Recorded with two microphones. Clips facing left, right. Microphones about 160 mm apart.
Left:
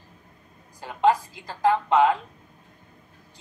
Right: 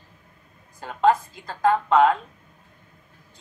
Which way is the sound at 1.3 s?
50° right (ahead or behind).